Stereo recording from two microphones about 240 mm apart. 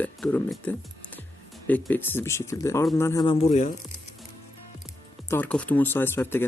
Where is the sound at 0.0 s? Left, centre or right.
Centre; by 3.7 s left.